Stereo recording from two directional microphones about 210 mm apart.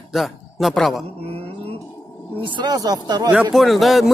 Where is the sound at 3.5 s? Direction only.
Centre (ahead or behind).